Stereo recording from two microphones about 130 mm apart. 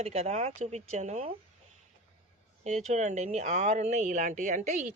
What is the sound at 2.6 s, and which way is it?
Speech, 60° right (ahead or behind).